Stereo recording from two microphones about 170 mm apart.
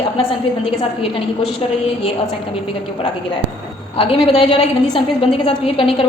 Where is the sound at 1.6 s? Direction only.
30° left (ahead or behind).